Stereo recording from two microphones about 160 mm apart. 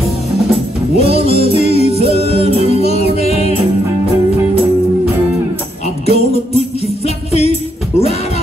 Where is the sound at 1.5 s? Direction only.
40° left (ahead or behind).